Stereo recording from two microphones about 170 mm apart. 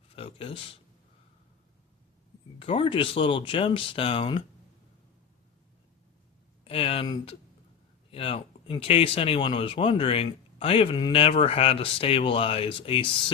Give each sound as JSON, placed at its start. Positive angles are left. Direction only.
{"t": 0.2, "sound": "a sound", "side_deg": 35}
{"t": 2.6, "sound": "speech", "side_deg": 30}
{"t": 6.7, "sound": "speech", "side_deg": 35}